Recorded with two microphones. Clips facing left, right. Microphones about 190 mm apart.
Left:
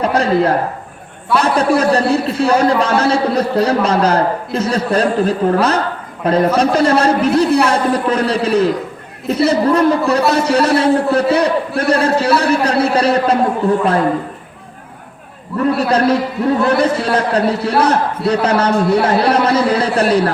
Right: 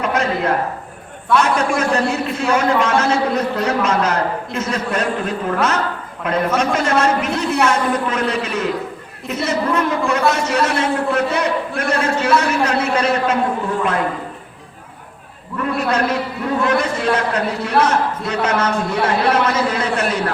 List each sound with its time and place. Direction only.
0.0 s a sound: 35° left (ahead or behind)
1.3 s a man's voice: 35° left (ahead or behind)
15.9 s a man's voice: 35° left (ahead or behind)